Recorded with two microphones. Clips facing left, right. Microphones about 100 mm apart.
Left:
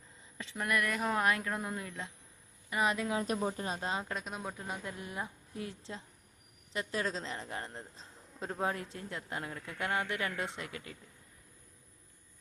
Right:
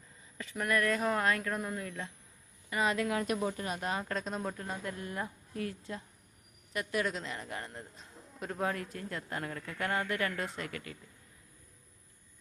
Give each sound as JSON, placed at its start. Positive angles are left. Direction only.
{"t": 0.3, "sound": "speech", "side_deg": 20}
{"t": 4.1, "sound": "speech", "side_deg": 5}